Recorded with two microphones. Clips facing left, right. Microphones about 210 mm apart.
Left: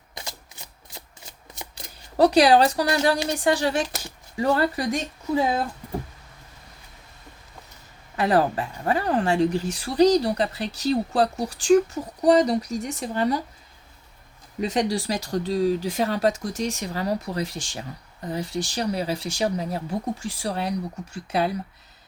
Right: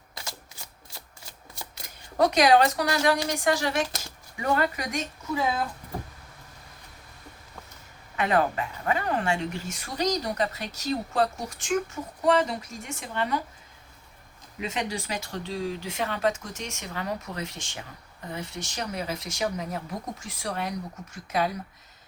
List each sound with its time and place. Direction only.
0.9 s a sound: 20° left (ahead or behind)
1.7 s speech: 35° left (ahead or behind)
8.1 s speech: 35° left (ahead or behind)
14.6 s speech: 35° left (ahead or behind)